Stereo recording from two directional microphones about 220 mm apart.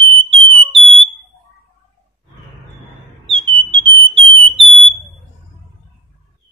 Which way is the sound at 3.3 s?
25° right (ahead or behind).